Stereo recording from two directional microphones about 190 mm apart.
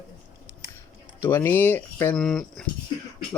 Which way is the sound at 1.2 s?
10° left (ahead or behind).